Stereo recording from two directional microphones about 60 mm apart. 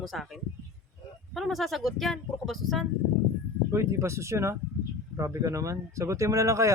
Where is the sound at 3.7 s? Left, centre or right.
Right.